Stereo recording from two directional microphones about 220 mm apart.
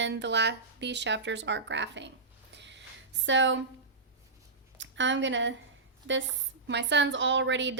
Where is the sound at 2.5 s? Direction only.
55° right (ahead or behind).